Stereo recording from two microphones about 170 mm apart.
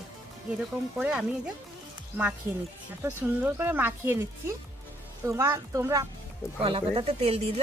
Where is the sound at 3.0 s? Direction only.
10° right (ahead or behind).